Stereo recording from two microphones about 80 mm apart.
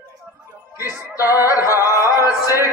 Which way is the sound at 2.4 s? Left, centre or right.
Right.